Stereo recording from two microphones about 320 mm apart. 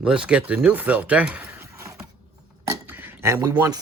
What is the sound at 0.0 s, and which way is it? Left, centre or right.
Speech, centre.